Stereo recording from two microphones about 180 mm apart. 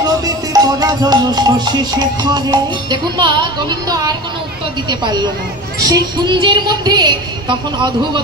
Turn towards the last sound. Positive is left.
turn(degrees=-25)  # may be behind; listen again after turning